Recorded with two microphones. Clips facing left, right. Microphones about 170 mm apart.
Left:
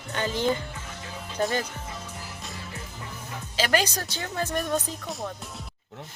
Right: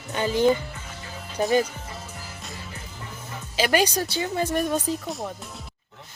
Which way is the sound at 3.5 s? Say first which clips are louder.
Right 3 dB; 15° right (ahead or behind).